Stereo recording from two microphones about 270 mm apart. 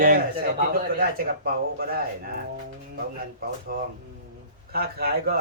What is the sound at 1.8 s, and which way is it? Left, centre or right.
Speech, right.